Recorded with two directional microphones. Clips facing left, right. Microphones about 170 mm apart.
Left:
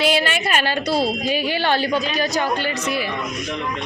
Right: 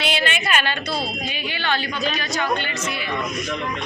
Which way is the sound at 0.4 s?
35° left (ahead or behind).